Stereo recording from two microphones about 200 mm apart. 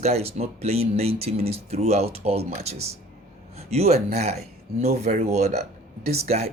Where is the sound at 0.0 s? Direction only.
30° right (ahead or behind).